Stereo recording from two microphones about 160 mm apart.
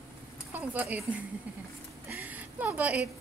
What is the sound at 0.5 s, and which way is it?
Speech, 10° right (ahead or behind).